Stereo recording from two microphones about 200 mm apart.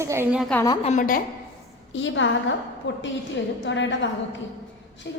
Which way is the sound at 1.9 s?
70° left (ahead or behind).